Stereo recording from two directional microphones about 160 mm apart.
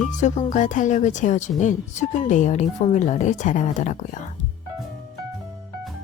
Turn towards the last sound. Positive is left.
turn(degrees=50)  # may be behind; listen again after turning